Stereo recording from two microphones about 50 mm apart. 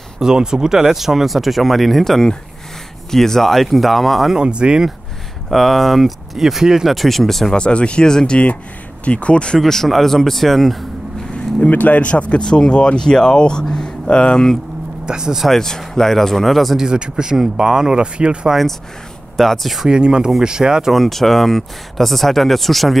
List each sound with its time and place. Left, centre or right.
0.2 s speech: centre
4.3 s speech: centre
5.5 s speech: centre
7.5 s speech: left
9.6 s speech: centre
11.3 s speech: left
15.0 s speech: centre
15.4 s speech: centre
16.7 s speech: centre
19.3 s speech: centre
19.9 s speech: centre
20.9 s speech: centre